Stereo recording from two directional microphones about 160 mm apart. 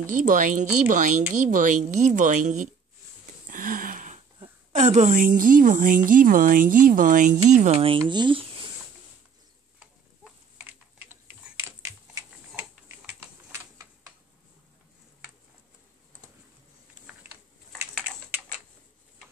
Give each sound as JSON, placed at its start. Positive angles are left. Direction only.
{"t": 0.0, "sound": "a woman's voice", "side_deg": -55}
{"t": 3.4, "sound": "a sound", "side_deg": -55}
{"t": 4.4, "sound": "a woman's voice", "side_deg": -45}
{"t": 11.6, "sound": "typing", "side_deg": -20}